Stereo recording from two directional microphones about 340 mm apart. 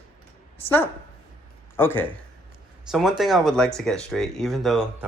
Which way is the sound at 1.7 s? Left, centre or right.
Centre.